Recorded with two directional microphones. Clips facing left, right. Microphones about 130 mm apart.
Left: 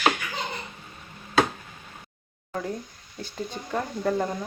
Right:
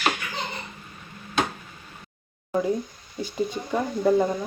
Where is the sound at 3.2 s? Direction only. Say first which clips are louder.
Right 7 dB; 10° right (ahead or behind).